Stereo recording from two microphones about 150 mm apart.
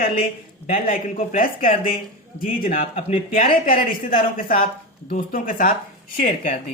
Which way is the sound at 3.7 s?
65° left (ahead or behind).